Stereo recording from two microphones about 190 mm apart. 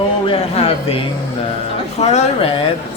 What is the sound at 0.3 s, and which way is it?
A woman's voice, 30° left (ahead or behind).